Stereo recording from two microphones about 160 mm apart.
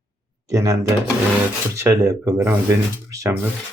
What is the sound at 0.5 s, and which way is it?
Speech, 20° right (ahead or behind).